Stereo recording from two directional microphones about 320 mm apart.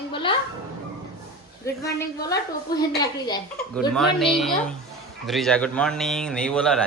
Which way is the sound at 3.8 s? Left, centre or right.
Centre.